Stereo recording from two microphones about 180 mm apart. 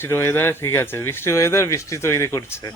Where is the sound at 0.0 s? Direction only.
15° left (ahead or behind).